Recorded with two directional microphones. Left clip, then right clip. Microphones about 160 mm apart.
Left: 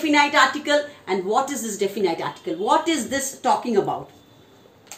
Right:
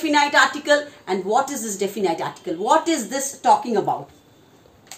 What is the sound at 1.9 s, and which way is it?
Speech, 35° right (ahead or behind).